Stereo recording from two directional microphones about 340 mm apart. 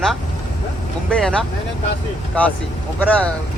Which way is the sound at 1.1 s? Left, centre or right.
Centre.